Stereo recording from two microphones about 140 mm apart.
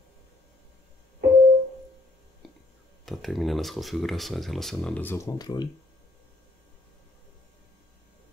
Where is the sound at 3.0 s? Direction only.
Centre (ahead or behind); by 5.6 s 30° left (ahead or behind).